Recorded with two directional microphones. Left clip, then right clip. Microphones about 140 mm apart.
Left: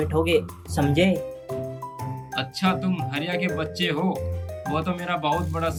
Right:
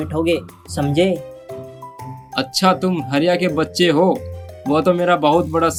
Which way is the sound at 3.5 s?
45° right (ahead or behind).